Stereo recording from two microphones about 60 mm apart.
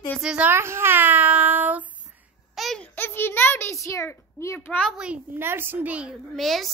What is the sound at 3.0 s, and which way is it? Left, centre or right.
Speech, left.